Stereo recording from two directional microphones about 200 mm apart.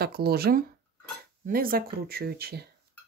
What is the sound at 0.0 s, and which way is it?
Speech, 50° right (ahead or behind).